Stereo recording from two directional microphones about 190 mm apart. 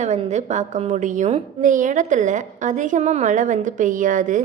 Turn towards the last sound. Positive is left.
turn(degrees=-45)  # may be behind; listen again after turning